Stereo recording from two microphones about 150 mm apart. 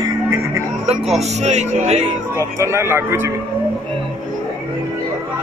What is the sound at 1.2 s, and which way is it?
Speech, 50° right (ahead or behind).